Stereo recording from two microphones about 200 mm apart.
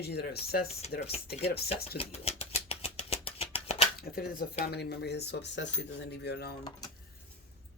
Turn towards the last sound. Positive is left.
turn(degrees=55)  # may be behind; listen again after turning